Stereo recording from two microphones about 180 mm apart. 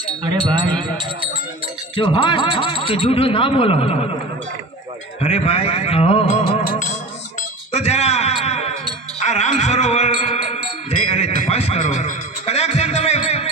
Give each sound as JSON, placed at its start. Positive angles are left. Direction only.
{"t": 0.3, "sound": "speech", "side_deg": -25}
{"t": 2.0, "sound": "a sound", "side_deg": 30}
{"t": 2.8, "sound": "a man's voice", "side_deg": 30}
{"t": 5.2, "sound": "a man's voice", "side_deg": 35}
{"t": 7.7, "sound": "a man's voice", "side_deg": 35}
{"t": 9.2, "sound": "music", "side_deg": 40}